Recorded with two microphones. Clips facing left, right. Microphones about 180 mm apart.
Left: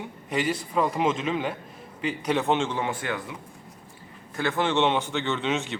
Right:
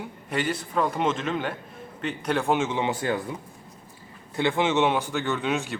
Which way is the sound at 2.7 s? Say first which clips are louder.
Right 2 dB; 20° right (ahead or behind).